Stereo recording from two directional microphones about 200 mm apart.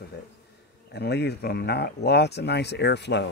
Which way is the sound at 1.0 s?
55° left (ahead or behind).